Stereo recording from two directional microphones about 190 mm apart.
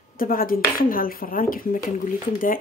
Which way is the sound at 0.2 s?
50° left (ahead or behind).